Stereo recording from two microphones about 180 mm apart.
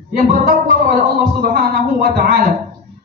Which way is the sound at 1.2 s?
55° right (ahead or behind).